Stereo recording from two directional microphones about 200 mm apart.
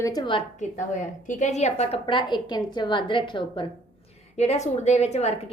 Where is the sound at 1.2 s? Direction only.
35° left (ahead or behind).